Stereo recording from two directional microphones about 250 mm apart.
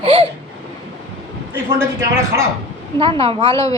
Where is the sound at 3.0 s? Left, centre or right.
Right.